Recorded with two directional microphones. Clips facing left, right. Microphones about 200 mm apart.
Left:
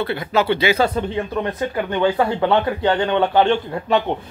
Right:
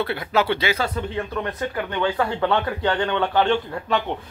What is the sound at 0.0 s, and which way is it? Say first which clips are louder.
Speech: left 2 dB; 5° right (ahead or behind).